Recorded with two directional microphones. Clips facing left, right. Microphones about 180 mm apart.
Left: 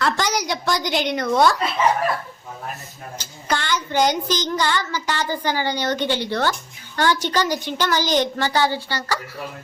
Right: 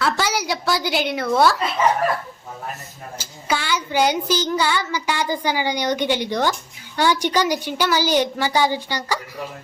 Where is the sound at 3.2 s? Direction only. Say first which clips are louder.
Even; 10° right (ahead or behind).